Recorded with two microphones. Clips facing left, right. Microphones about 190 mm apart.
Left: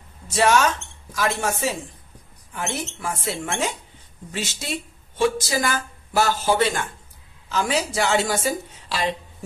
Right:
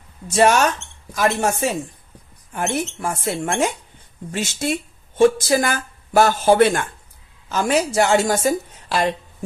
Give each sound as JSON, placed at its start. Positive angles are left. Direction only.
{"t": 0.3, "sound": "speech", "side_deg": -50}